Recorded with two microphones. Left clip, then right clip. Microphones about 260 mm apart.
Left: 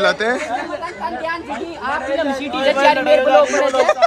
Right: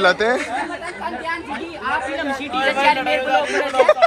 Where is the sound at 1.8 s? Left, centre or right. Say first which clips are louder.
Left 3 dB; left.